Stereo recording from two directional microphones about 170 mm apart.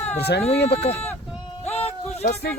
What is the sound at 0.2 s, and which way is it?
Speech, 75° left (ahead or behind).